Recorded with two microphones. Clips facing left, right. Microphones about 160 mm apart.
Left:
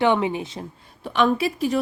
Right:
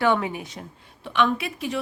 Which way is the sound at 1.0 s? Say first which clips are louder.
Left 3 dB; 35° left (ahead or behind).